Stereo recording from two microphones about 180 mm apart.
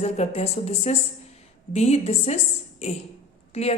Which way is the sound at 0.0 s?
35° left (ahead or behind).